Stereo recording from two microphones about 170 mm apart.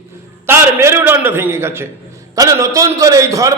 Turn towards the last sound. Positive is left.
turn(degrees=-20)  # may be behind; listen again after turning